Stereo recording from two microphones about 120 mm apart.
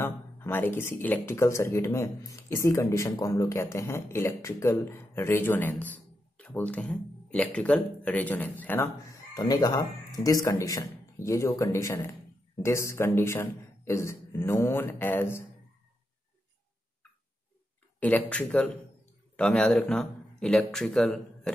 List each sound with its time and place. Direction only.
0.0 s speech: 20° left (ahead or behind)
9.3 s speech: 35° left (ahead or behind); by 15.4 s 20° left (ahead or behind)
18.3 s speech: 10° left (ahead or behind)